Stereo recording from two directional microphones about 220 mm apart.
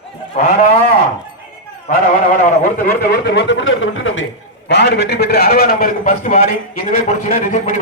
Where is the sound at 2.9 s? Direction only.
45° left (ahead or behind).